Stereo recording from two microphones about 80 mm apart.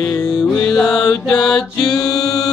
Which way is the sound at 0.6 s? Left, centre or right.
Centre.